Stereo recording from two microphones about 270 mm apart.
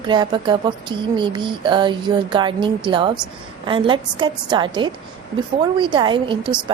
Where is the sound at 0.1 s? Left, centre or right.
Centre.